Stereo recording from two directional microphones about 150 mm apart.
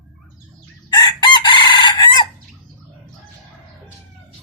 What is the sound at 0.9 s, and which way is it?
Chicken, 25° left (ahead or behind).